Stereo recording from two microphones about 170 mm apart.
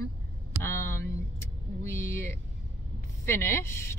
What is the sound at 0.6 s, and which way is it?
Speech, 15° left (ahead or behind).